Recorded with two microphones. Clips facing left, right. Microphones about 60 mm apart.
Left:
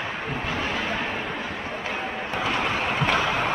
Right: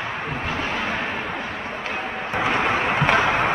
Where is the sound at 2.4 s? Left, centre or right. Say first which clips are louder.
Right 5 dB; right.